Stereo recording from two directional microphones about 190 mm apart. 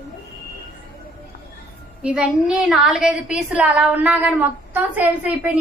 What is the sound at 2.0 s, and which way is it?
A woman's voice, 5° right (ahead or behind).